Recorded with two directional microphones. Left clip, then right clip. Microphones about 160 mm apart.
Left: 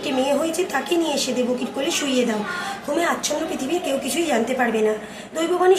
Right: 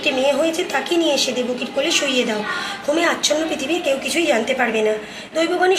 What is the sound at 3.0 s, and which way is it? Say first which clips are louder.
A woman's voice: right 4 dB; 10° left (ahead or behind).